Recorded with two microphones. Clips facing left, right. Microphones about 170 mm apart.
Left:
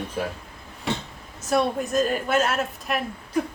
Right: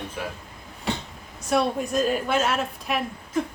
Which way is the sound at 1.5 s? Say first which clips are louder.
Even; centre (ahead or behind).